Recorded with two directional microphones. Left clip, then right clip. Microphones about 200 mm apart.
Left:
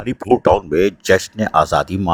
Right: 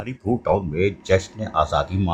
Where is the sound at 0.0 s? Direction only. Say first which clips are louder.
Left 10 dB; 45° left (ahead or behind).